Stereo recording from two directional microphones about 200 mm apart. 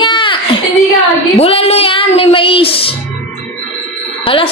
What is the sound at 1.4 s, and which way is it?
Music, 30° left (ahead or behind).